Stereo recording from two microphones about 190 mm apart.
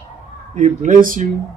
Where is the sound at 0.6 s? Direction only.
45° right (ahead or behind).